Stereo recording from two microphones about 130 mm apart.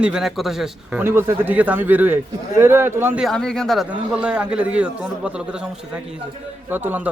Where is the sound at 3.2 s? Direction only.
Centre (ahead or behind).